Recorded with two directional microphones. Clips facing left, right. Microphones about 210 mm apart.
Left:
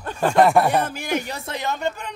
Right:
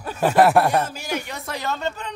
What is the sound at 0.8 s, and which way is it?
Speech, 55° left (ahead or behind).